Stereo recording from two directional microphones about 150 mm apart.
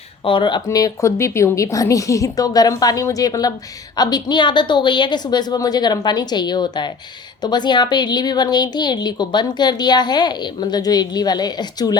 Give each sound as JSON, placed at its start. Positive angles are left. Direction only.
{"t": 0.3, "sound": "a woman's voice", "side_deg": 30}